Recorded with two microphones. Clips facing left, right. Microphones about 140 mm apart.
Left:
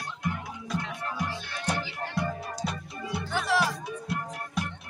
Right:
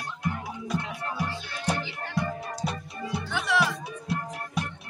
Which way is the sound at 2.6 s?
5° right (ahead or behind).